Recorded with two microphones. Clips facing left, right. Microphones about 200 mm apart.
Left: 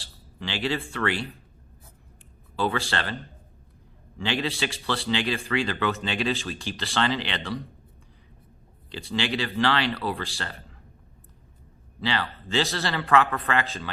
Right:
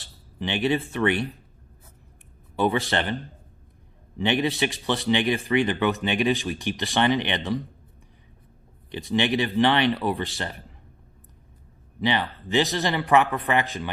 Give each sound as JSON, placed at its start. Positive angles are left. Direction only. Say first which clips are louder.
{"t": 0.0, "sound": "speech", "louder": "right 5 dB", "side_deg": -20}
{"t": 2.6, "sound": "speech", "louder": "right 4 dB", "side_deg": -20}
{"t": 4.2, "sound": "speech", "louder": "right 5 dB", "side_deg": -20}
{"t": 8.9, "sound": "speech", "louder": "right 5 dB", "side_deg": -20}
{"t": 11.9, "sound": "speech", "louder": "right 4 dB", "side_deg": -20}